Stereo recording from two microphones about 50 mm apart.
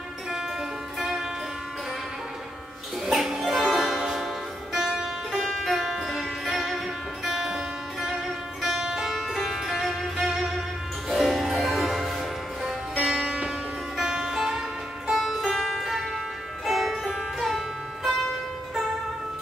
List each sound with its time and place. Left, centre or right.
0.9 s music: centre
3.1 s music: centre
13.2 s music: right
13.9 s music: centre